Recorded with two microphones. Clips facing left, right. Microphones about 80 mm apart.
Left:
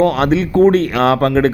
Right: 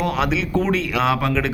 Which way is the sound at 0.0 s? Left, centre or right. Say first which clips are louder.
Left 8 dB; left.